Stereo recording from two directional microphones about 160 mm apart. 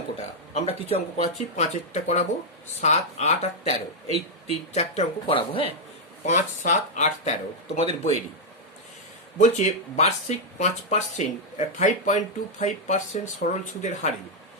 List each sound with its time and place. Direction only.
0.5 s speech: 40° left (ahead or behind)
6.2 s speech: 50° left (ahead or behind)
9.4 s speech: 45° left (ahead or behind)